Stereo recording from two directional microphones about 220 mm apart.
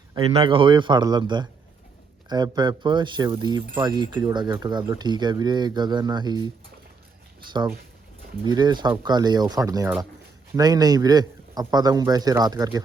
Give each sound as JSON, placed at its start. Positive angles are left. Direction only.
{"t": 0.1, "sound": "speech", "side_deg": -25}
{"t": 8.4, "sound": "a man's voice", "side_deg": -20}